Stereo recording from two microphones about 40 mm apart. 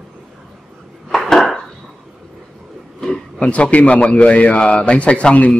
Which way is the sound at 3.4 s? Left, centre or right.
Left.